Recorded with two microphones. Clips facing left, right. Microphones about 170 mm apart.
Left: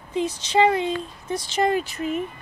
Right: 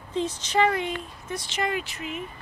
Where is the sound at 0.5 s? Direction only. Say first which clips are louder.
Left 4 dB; 25° left (ahead or behind); by 2.2 s 40° left (ahead or behind).